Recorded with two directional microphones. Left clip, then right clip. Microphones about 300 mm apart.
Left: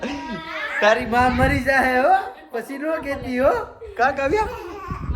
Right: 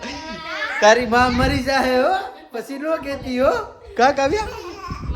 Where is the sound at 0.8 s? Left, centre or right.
Centre.